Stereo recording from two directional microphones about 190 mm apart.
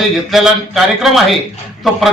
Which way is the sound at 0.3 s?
Centre (ahead or behind).